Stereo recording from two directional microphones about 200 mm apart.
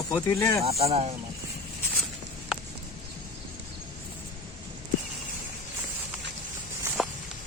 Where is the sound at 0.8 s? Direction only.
30° right (ahead or behind).